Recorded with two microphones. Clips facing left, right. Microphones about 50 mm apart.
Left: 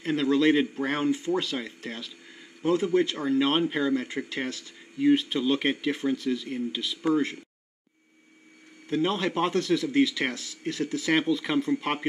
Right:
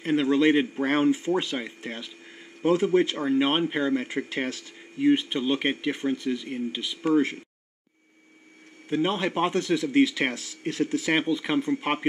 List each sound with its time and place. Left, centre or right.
0.0 s speech: right
2.6 s speech: right
4.3 s speech: right
4.9 s speech: centre
8.8 s speech: centre
9.9 s speech: right